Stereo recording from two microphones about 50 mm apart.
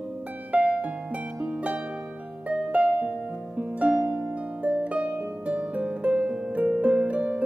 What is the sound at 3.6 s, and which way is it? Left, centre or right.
Harp, right.